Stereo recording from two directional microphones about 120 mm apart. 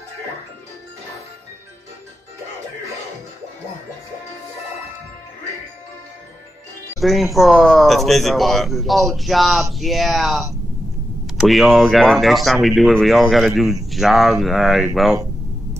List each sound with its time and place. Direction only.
7.0 s speech: centre (ahead or behind)